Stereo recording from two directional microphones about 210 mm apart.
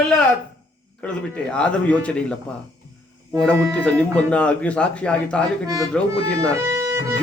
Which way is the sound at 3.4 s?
5° left (ahead or behind).